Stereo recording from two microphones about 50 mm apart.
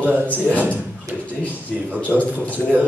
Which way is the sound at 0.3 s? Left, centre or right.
Left.